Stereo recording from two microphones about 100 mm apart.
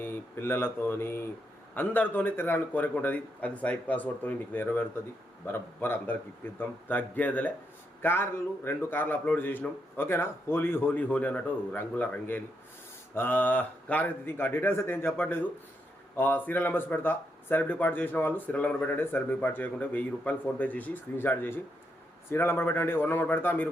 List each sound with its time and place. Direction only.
0.0 s a man's voice: 20° left (ahead or behind)